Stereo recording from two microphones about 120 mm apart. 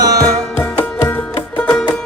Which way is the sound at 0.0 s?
30° right (ahead or behind).